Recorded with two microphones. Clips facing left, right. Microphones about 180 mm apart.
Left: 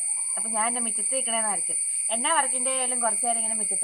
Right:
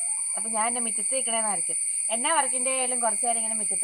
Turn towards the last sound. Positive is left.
turn(degrees=0)  # may be behind; listen again after turning